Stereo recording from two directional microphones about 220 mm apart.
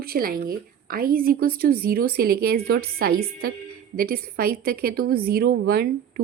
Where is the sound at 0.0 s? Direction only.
40° right (ahead or behind).